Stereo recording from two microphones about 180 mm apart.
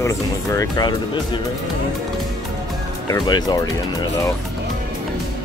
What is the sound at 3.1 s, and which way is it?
Speech, 20° left (ahead or behind).